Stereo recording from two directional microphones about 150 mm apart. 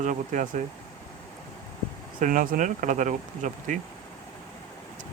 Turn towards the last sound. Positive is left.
turn(degrees=-55)  # may be behind; listen again after turning